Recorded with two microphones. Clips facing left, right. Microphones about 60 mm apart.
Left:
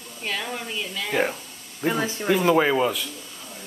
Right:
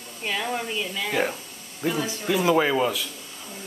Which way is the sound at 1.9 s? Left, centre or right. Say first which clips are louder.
Left 2 dB; left.